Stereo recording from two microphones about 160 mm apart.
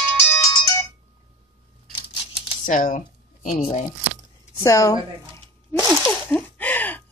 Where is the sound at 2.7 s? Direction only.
55° left (ahead or behind).